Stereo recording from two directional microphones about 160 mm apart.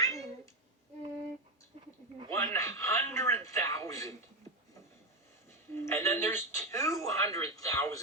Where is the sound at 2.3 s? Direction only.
20° left (ahead or behind).